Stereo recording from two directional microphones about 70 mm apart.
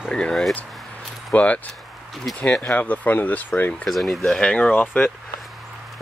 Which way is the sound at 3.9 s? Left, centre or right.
Centre.